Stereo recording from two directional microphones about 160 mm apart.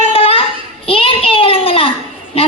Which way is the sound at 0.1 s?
35° left (ahead or behind).